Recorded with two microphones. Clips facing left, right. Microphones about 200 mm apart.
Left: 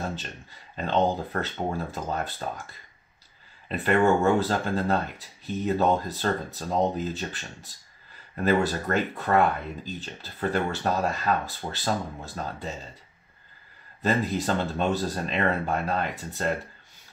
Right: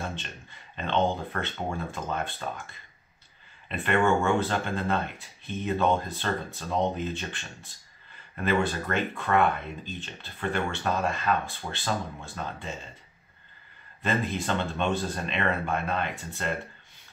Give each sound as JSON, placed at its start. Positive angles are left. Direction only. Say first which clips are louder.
{"t": 0.0, "sound": "speech", "louder": "left 3 dB", "side_deg": 40}
{"t": 14.0, "sound": "speech", "louder": "left 3 dB", "side_deg": 40}